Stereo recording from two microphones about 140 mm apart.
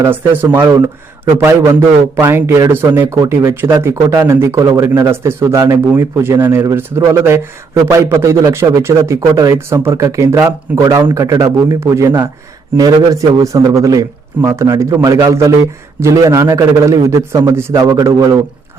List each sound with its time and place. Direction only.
0.0 s speech: 15° right (ahead or behind)